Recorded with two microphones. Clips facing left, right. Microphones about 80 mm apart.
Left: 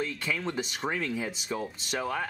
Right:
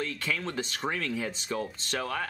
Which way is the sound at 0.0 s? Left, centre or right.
Centre.